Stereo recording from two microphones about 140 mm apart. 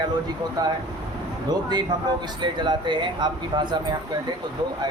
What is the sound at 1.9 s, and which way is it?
Speech, 30° right (ahead or behind).